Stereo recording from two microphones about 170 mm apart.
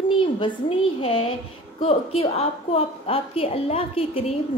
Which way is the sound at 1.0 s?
35° left (ahead or behind).